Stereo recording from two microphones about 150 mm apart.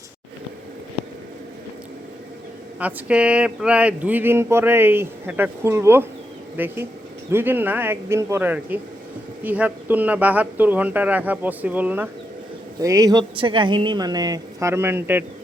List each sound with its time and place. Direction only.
2.7 s speech: 10° right (ahead or behind)
12.8 s speech: 25° right (ahead or behind)